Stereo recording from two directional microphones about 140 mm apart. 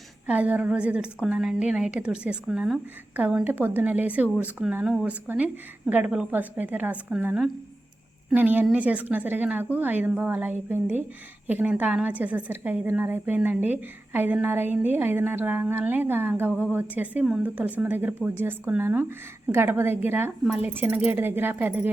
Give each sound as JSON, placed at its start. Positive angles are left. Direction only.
{"t": 0.3, "sound": "a woman's voice", "side_deg": -10}